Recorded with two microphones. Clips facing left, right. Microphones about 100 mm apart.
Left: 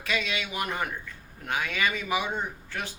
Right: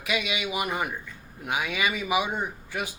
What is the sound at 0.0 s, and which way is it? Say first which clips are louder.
A man's voice: right 2 dB; 15° right (ahead or behind).